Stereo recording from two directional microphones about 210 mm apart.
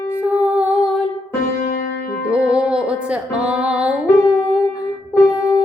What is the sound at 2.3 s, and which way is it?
Music, 5° right (ahead or behind).